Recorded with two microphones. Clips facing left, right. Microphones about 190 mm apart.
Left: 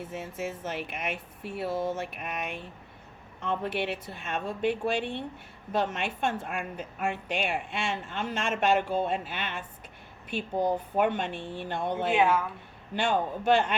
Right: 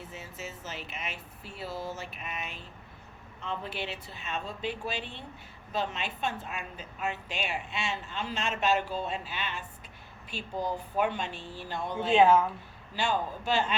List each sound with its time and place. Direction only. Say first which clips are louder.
0.0 s a woman's voice: left 7 dB; 55° left (ahead or behind)
12.1 s a woman's voice: right 4 dB; 25° right (ahead or behind)
12.9 s speech: left 3 dB; 55° left (ahead or behind)